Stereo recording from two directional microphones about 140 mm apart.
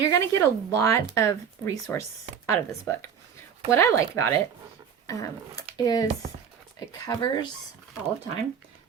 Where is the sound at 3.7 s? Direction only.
20° left (ahead or behind).